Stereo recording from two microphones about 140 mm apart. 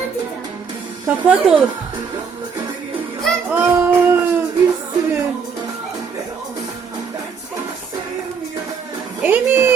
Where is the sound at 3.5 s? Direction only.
15° right (ahead or behind).